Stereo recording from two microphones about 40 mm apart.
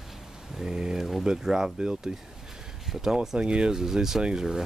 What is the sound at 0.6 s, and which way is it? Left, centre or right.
Speech, centre.